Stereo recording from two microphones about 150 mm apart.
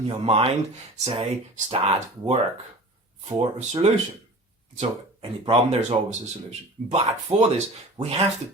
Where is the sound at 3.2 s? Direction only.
50° right (ahead or behind).